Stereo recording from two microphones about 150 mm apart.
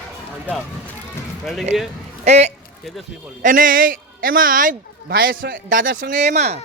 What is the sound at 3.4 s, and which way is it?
A man's voice, 65° right (ahead or behind).